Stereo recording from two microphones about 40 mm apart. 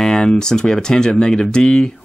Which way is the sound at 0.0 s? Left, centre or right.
Centre.